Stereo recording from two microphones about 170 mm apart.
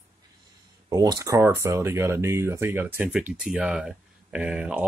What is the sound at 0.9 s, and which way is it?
Speech, 20° right (ahead or behind).